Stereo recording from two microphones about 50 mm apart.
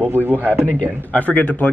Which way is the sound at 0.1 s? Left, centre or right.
Right.